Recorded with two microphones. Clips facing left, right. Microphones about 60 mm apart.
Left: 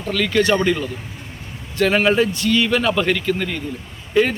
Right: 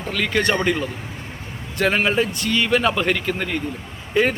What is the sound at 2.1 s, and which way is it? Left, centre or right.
A man's voice, right.